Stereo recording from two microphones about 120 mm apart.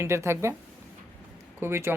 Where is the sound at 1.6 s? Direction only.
20° right (ahead or behind).